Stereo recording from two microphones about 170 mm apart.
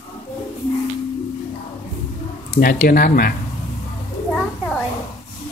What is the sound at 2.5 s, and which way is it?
Speech, 50° left (ahead or behind).